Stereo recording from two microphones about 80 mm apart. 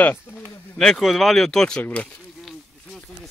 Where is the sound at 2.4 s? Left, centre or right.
Centre.